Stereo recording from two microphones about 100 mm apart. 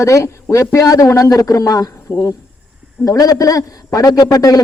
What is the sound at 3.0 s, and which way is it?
Speech, 35° left (ahead or behind).